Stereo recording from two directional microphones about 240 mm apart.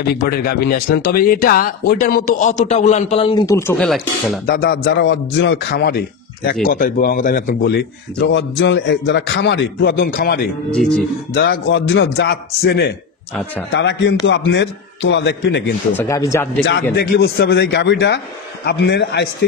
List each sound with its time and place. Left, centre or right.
0.0 s speech: left; by 4.4 s centre
4.5 s a man's voice: left
10.7 s speech: centre
11.3 s a man's voice: left
16.0 s speech: centre
16.9 s a man's voice: left